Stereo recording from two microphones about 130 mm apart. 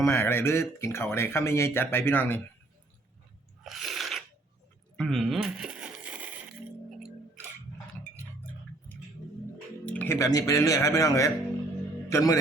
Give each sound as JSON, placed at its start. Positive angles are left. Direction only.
{"t": 0.0, "sound": "speech", "side_deg": 20}
{"t": 3.6, "sound": "crunch", "side_deg": 0}
{"t": 4.9, "sound": "coin", "side_deg": 0}
{"t": 9.8, "sound": "music", "side_deg": 10}
{"t": 10.2, "sound": "a man's voice", "side_deg": 30}